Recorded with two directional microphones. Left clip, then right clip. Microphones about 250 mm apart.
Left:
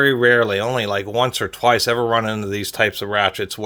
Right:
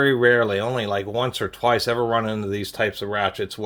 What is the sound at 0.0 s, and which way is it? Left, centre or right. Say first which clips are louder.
Speech: left 3 dB; left.